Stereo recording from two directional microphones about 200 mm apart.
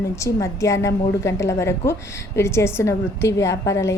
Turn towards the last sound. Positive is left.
turn(degrees=15)  # may be behind; listen again after turning